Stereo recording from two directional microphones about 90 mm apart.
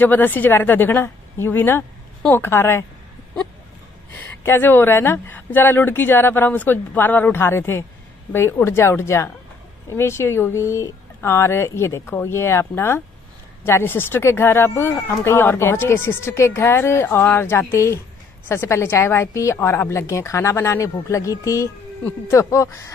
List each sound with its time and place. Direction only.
0.0 s speech: 20° left (ahead or behind)
4.4 s a woman's voice: 25° left (ahead or behind)